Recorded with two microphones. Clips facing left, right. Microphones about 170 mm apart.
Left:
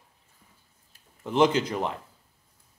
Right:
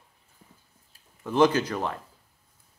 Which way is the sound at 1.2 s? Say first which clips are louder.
Right 1 dB; 20° left (ahead or behind).